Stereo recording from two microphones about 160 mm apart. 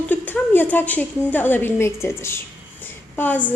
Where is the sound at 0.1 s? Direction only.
10° left (ahead or behind).